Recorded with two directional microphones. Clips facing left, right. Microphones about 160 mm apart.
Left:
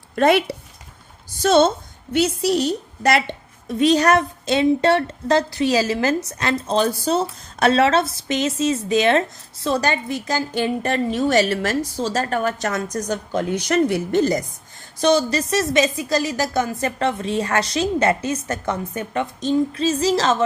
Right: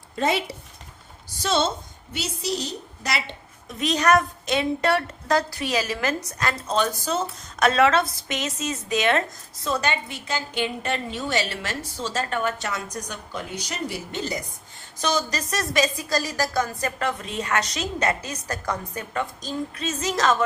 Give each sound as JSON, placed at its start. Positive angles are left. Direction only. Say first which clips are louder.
{"t": 0.2, "sound": "a woman's voice", "louder": "left 8 dB", "side_deg": 65}
{"t": 1.4, "sound": "a woman's voice", "louder": "left 8 dB", "side_deg": 50}
{"t": 3.7, "sound": "a woman's voice", "louder": "left 5 dB", "side_deg": 30}
{"t": 13.7, "sound": "a woman's voice", "louder": "left 13 dB", "side_deg": 60}
{"t": 15.0, "sound": "a woman's voice", "louder": "left 8 dB", "side_deg": 30}